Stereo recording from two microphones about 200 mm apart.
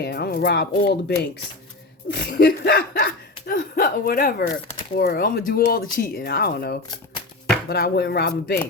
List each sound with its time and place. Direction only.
0.0 s chuckle: 55° left (ahead or behind)